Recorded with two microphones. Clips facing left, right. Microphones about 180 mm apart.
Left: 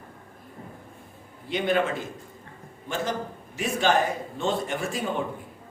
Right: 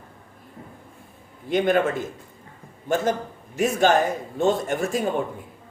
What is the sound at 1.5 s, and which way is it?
Speech, 50° right (ahead or behind).